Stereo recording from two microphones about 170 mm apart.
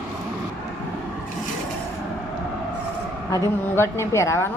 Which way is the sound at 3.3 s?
15° left (ahead or behind).